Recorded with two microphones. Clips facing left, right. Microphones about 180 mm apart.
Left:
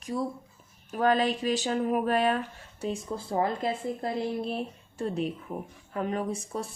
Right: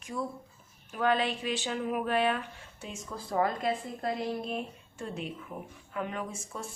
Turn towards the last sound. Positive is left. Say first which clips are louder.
# left 7 dB
turn(degrees=35)  # may be behind; listen again after turning